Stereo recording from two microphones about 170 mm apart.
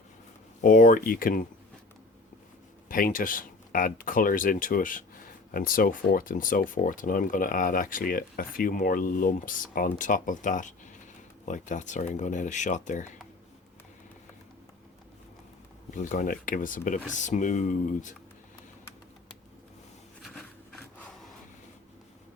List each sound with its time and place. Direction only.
0.6 s speech: 50° left (ahead or behind)
2.9 s speech: 55° left (ahead or behind)
16.0 s speech: 50° left (ahead or behind)